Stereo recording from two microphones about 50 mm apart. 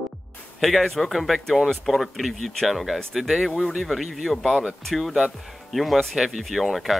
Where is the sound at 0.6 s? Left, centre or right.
Centre.